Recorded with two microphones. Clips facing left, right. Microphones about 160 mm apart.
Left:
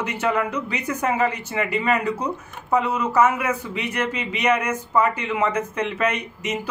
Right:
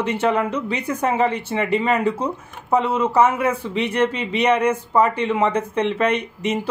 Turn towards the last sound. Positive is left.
turn(degrees=-30)  # may be behind; listen again after turning